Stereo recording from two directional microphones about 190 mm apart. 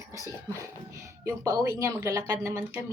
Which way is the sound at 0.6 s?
15° right (ahead or behind).